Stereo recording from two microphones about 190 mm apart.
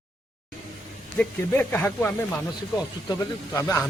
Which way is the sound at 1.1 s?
10° left (ahead or behind).